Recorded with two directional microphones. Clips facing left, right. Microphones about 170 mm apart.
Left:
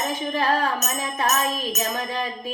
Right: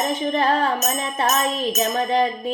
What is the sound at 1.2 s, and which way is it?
Music, 25° right (ahead or behind).